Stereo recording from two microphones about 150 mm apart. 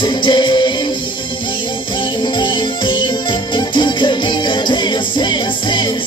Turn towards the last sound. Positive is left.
turn(degrees=30)  # may be behind; listen again after turning